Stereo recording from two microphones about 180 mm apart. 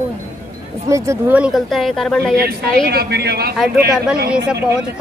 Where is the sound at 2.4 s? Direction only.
60° right (ahead or behind).